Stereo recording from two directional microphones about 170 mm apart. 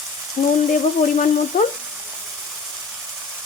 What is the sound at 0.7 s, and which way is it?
Speech, 50° left (ahead or behind).